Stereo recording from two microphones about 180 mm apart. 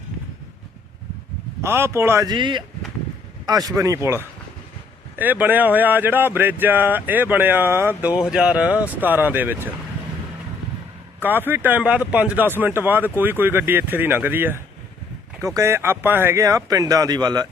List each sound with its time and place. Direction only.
1.6 s speech: 15° right (ahead or behind)
11.2 s speech: 10° right (ahead or behind)